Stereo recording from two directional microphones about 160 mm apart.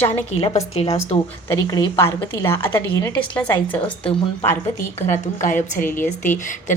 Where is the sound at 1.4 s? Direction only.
20° left (ahead or behind).